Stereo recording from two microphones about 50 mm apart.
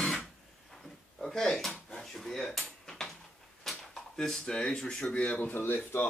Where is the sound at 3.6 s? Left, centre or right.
Centre.